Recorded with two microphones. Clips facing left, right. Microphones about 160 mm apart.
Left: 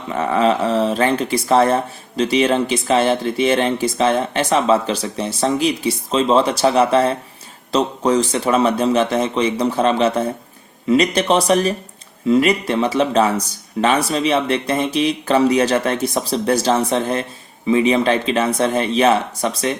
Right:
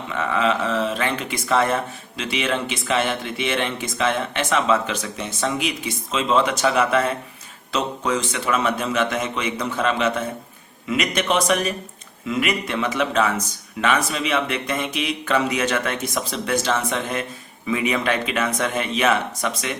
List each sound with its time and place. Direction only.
0.1 s speech: 35° left (ahead or behind)